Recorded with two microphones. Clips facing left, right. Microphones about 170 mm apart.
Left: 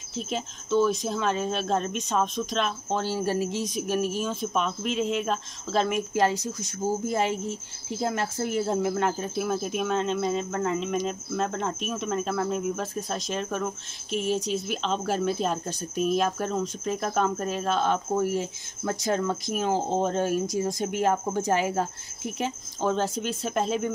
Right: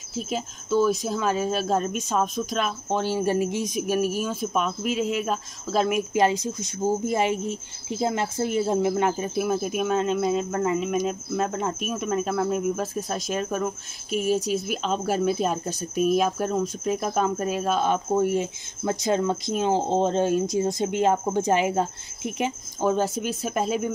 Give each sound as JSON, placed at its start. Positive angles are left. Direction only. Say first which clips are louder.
{"t": 0.1, "sound": "speech", "louder": "right 2 dB", "side_deg": -5}